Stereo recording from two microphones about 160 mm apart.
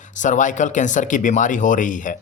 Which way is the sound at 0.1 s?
50° left (ahead or behind).